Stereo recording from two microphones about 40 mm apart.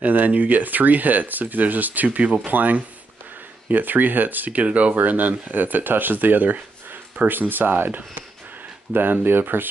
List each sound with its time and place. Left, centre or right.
0.0 s speech: right
2.0 s speech: right